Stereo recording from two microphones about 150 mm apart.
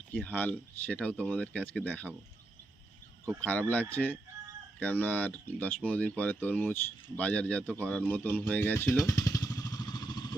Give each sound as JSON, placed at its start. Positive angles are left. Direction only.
{"t": 0.1, "sound": "speech", "side_deg": 10}
{"t": 3.4, "sound": "speech", "side_deg": 10}
{"t": 7.9, "sound": "motorcycle", "side_deg": 5}